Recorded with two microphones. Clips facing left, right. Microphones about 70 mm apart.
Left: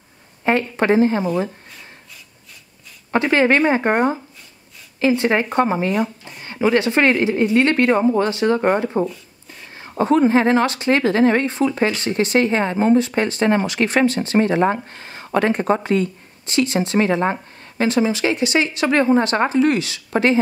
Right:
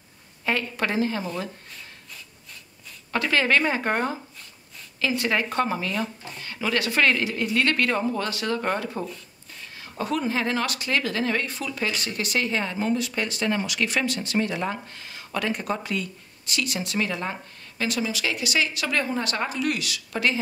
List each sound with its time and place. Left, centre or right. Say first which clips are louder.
0.5 s speech: left 9 dB; left
3.1 s speech: left 7 dB; left